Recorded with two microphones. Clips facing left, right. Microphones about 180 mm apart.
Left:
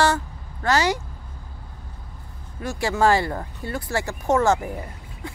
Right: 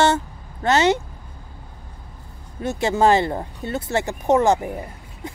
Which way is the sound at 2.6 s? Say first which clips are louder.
Right 3 dB; 20° right (ahead or behind).